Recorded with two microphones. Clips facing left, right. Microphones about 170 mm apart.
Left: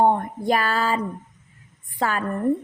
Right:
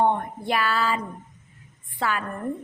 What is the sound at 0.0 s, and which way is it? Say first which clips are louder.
Speech: left 3 dB; 40° left (ahead or behind).